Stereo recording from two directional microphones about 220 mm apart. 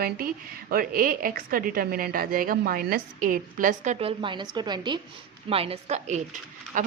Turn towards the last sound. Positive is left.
turn(degrees=-35)  # may be behind; listen again after turning